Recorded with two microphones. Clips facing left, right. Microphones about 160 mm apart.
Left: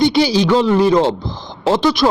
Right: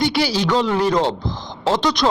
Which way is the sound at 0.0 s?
20° left (ahead or behind).